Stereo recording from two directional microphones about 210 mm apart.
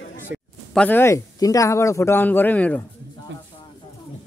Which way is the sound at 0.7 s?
10° left (ahead or behind).